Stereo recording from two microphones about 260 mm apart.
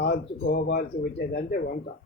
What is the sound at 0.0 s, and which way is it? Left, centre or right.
Speech, left.